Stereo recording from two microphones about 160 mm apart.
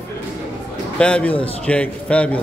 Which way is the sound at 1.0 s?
5° left (ahead or behind).